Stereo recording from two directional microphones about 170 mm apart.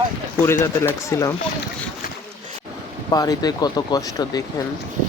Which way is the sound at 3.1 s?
20° left (ahead or behind).